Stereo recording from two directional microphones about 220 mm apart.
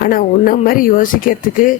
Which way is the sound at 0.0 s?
40° left (ahead or behind).